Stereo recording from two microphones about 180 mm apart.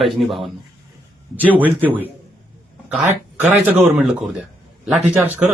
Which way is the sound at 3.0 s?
10° right (ahead or behind).